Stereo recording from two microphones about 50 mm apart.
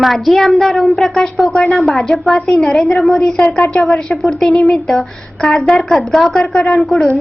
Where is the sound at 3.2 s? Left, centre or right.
Centre.